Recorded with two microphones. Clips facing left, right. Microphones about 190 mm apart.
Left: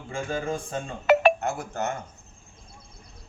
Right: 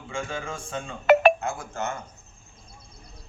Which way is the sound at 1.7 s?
40° left (ahead or behind).